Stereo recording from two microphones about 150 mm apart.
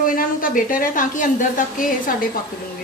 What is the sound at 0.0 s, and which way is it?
A woman's voice, 65° left (ahead or behind).